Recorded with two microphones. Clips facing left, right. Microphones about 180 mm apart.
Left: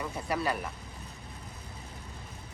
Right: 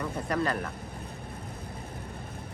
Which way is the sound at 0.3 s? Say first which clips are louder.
Right 2 dB; 10° left (ahead or behind).